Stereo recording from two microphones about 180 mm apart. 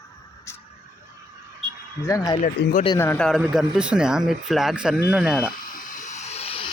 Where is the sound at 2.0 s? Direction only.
20° left (ahead or behind).